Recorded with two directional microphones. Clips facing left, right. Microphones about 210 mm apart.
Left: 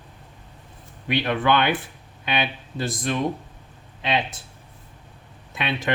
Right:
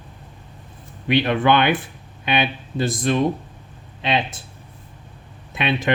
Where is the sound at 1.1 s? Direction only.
20° right (ahead or behind).